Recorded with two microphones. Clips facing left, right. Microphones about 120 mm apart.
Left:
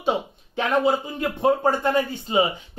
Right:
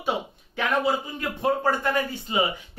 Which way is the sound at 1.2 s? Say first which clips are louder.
Left 4 dB; 25° left (ahead or behind).